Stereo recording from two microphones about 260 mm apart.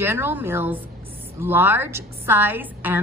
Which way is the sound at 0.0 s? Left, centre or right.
Centre.